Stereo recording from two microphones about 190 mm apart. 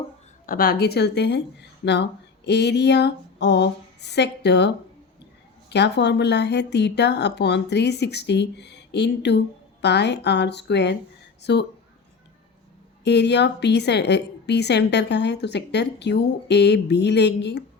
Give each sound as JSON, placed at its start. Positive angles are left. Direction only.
{"t": 0.4, "sound": "a woman's voice", "side_deg": 50}
{"t": 13.1, "sound": "a woman's voice", "side_deg": 65}